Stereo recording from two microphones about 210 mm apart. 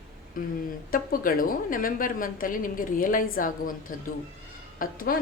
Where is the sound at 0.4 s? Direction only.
40° left (ahead or behind).